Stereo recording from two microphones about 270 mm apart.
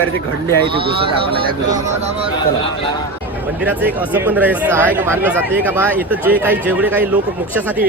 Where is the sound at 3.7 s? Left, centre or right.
Centre.